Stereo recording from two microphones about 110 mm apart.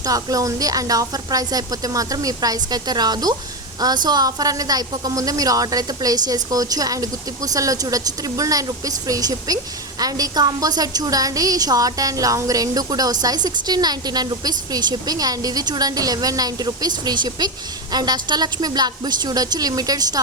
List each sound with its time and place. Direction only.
0.0 s a woman's voice: 35° right (ahead or behind)